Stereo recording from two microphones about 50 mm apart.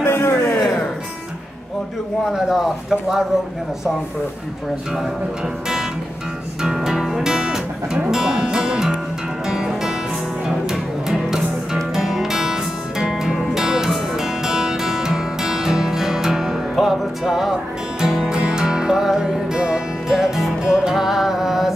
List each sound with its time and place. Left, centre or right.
0.0 s a sound: left
2.3 s speech: centre
6.6 s music: centre
18.3 s music: centre